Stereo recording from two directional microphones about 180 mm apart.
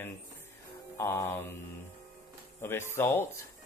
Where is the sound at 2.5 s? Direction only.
15° left (ahead or behind).